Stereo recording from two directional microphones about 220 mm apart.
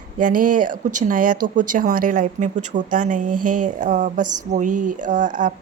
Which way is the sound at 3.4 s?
90° right.